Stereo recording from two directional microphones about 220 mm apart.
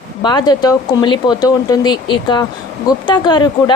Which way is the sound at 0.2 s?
20° left (ahead or behind).